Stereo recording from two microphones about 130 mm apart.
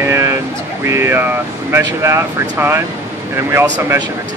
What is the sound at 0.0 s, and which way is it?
Vehicle, 25° right (ahead or behind).